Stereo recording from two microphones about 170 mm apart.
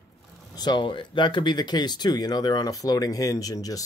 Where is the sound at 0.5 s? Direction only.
25° left (ahead or behind).